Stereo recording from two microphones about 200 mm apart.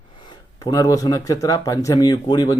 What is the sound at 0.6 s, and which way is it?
Speech, 15° left (ahead or behind).